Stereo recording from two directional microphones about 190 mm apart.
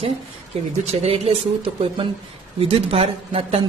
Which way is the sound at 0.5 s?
35° right (ahead or behind).